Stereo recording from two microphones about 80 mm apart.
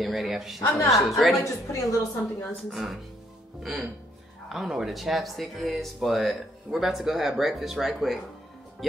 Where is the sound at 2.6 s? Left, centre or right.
Centre.